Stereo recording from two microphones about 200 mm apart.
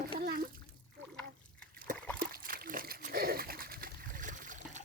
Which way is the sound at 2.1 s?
45° right (ahead or behind).